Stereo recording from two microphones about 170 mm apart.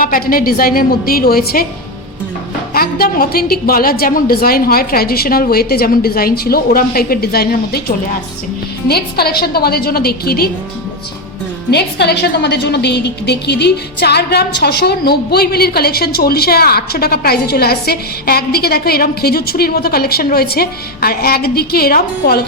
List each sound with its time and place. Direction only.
0.0 s a woman's voice: 55° left (ahead or behind)
2.7 s a woman's voice: 60° left (ahead or behind)
11.7 s a woman's voice: 80° left; by 22.4 s 60° left (ahead or behind)